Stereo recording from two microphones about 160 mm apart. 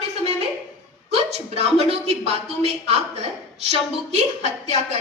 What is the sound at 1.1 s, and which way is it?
A man's voice, 40° right (ahead or behind).